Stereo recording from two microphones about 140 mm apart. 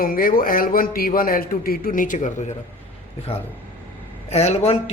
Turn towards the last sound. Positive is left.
turn(degrees=50)  # may be behind; listen again after turning